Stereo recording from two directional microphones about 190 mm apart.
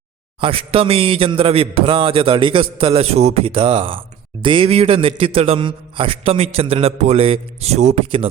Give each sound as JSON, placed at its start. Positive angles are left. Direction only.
{"t": 0.3, "sound": "a man's voice", "side_deg": -30}